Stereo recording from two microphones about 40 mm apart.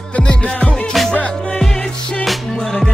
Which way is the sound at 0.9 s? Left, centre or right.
Centre.